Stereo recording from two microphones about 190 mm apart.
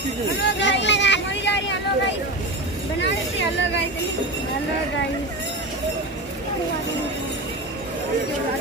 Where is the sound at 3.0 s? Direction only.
65° left (ahead or behind).